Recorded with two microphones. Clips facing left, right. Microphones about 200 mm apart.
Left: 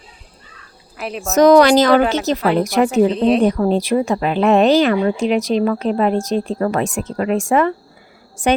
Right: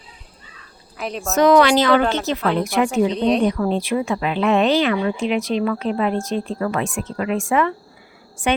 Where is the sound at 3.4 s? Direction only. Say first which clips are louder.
Left 4 dB; 40° left (ahead or behind).